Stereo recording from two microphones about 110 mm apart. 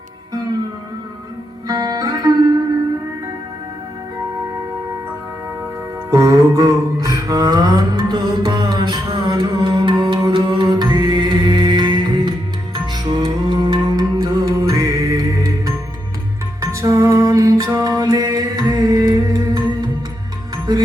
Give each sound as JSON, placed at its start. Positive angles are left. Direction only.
{"t": 1.6, "sound": "music", "side_deg": -35}
{"t": 6.1, "sound": "music", "side_deg": -30}
{"t": 20.7, "sound": "music", "side_deg": -35}